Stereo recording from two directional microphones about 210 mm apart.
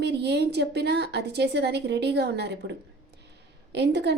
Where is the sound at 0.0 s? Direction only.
55° right (ahead or behind).